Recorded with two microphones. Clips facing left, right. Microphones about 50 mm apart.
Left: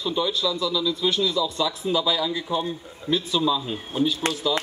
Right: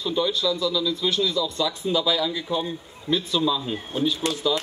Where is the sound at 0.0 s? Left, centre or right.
Centre.